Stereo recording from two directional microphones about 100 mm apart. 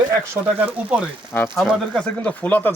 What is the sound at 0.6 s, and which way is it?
Speech, 15° right (ahead or behind).